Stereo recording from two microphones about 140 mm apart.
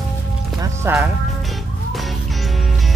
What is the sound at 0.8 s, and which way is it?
Speech, 15° right (ahead or behind).